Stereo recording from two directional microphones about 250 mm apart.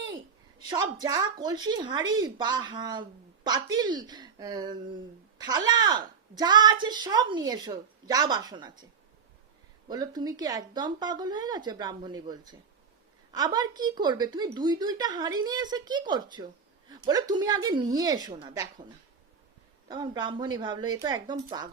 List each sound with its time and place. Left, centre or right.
0.7 s speech: centre
9.9 s speech: centre
19.9 s speech: centre